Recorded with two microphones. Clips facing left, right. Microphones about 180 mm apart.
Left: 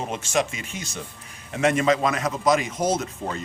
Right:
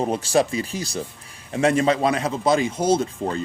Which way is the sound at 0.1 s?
35° right (ahead or behind).